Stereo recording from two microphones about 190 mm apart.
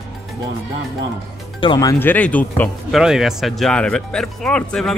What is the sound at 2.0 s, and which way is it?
Speech, 10° left (ahead or behind).